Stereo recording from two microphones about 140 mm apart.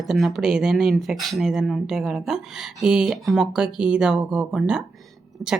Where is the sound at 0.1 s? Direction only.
Centre (ahead or behind).